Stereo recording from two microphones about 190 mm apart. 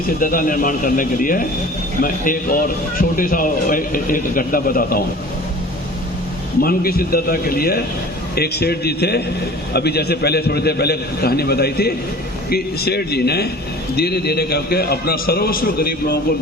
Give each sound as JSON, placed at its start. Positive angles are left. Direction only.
{"t": 0.2, "sound": "a man's voice", "side_deg": 45}
{"t": 6.6, "sound": "a man's voice", "side_deg": 50}